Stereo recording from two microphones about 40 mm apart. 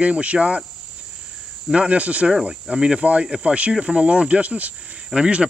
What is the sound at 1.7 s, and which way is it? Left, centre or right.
Speech, right.